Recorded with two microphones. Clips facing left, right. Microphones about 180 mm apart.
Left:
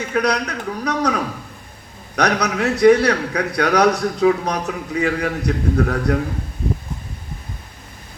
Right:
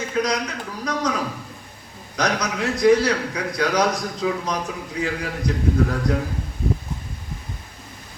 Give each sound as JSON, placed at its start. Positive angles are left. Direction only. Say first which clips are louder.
{"t": 0.1, "sound": "a man's voice", "louder": "left 4 dB", "side_deg": 65}
{"t": 2.1, "sound": "a man's voice", "louder": "left 4 dB", "side_deg": 65}